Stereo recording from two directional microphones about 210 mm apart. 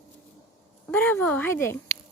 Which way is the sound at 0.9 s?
10° left (ahead or behind).